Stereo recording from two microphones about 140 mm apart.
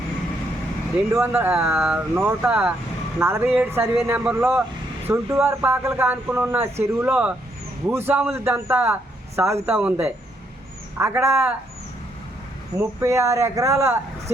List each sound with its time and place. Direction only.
1.1 s speech: 15° right (ahead or behind)
4.3 s speech: 10° right (ahead or behind)
5.0 s speech: 20° right (ahead or behind)
12.7 s speech: 20° right (ahead or behind)